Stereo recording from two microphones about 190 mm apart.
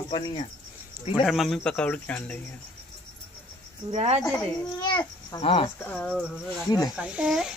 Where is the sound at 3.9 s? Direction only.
35° right (ahead or behind).